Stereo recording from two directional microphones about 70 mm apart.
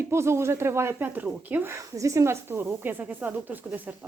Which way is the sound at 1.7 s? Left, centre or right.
Right.